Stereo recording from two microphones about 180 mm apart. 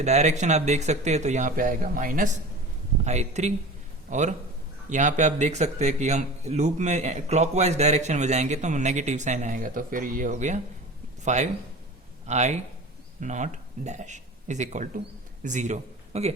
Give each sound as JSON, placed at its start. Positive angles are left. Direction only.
{"t": 0.0, "sound": "a man's voice", "side_deg": -40}